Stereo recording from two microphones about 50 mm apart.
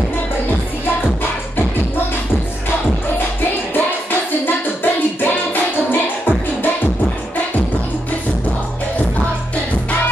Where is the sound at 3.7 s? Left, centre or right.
Left.